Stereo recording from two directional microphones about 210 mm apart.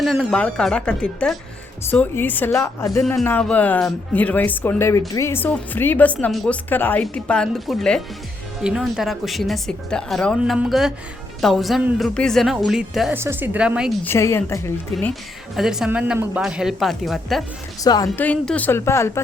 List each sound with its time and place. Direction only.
0.0 s a woman's voice: centre (ahead or behind)
14.0 s speech: 10° left (ahead or behind)
15.5 s a woman's voice: centre (ahead or behind)
17.8 s speech: 15° left (ahead or behind)
18.3 s speech: 5° left (ahead or behind)